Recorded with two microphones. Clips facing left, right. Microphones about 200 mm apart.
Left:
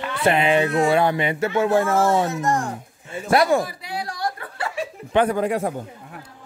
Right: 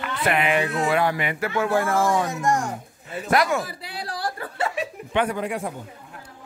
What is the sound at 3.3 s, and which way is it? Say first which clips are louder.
Speech: left 4 dB; 30° left (ahead or behind).